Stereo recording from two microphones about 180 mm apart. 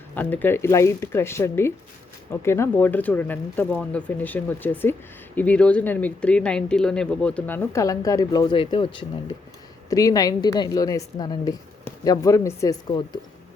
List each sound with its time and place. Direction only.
0.1 s a woman's voice: 10° left (ahead or behind)